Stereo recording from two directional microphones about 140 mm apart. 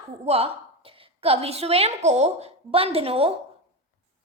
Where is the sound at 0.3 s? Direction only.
45° right (ahead or behind).